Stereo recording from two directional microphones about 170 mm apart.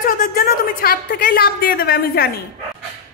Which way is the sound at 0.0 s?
55° left (ahead or behind).